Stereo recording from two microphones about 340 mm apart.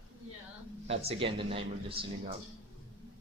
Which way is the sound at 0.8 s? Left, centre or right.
Centre.